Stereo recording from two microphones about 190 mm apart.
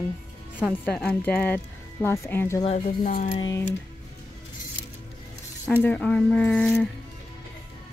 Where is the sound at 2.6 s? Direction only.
35° left (ahead or behind).